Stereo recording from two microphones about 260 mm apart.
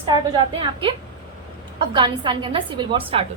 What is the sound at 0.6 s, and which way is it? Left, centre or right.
A woman's voice, centre.